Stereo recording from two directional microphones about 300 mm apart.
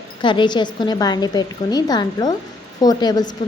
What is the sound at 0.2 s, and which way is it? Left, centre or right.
A woman's voice, centre.